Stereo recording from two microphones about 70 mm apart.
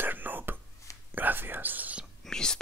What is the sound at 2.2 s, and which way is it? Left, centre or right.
Whispering, centre.